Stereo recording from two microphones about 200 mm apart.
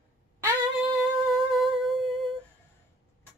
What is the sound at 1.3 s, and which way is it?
Humming, centre (ahead or behind).